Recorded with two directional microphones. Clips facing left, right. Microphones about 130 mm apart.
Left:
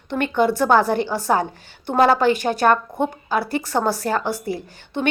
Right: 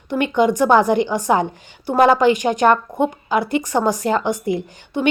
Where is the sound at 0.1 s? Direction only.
15° right (ahead or behind).